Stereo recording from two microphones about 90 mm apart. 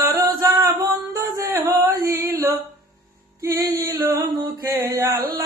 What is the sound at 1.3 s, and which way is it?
Mantra, 35° right (ahead or behind).